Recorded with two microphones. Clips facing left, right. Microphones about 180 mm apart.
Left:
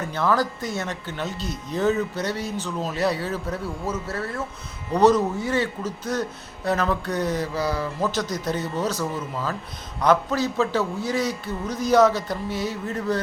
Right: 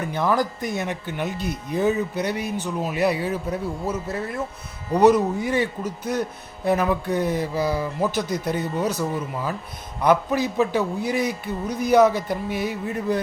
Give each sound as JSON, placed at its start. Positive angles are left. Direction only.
{"t": 0.0, "sound": "speech", "side_deg": -15}